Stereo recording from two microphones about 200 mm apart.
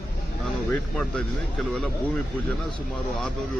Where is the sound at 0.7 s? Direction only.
Centre (ahead or behind).